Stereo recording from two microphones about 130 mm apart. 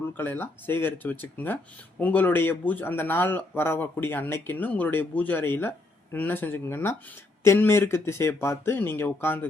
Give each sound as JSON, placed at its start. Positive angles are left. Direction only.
{"t": 0.1, "sound": "speech", "side_deg": 15}